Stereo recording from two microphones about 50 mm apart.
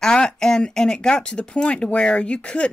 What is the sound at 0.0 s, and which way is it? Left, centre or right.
Speech, centre.